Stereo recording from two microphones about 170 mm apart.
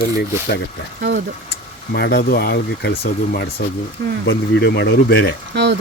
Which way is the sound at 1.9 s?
75° left (ahead or behind).